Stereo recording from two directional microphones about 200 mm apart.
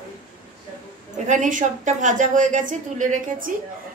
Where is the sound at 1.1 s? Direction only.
40° right (ahead or behind).